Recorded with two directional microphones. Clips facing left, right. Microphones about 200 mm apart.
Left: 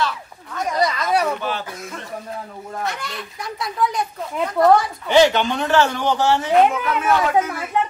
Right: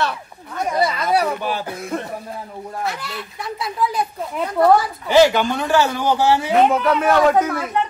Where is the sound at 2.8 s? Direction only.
5° right (ahead or behind).